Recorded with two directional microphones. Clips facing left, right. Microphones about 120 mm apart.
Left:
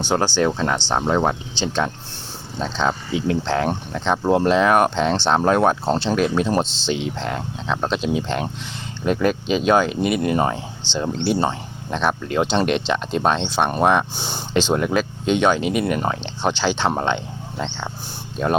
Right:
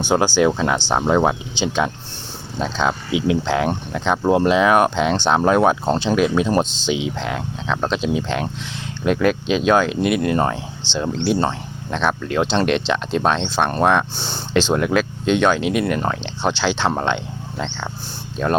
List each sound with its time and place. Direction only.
0.0 s speech: 10° right (ahead or behind); by 14.4 s 15° left (ahead or behind)
14.5 s speech: centre (ahead or behind)
17.6 s speech: 20° left (ahead or behind)
18.4 s speech: 5° left (ahead or behind)